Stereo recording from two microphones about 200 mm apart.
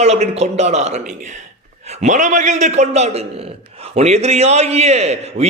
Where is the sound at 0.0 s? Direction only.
30° right (ahead or behind).